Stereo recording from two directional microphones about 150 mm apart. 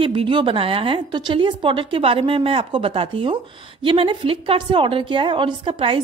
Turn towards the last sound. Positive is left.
turn(degrees=-35)  # may be behind; listen again after turning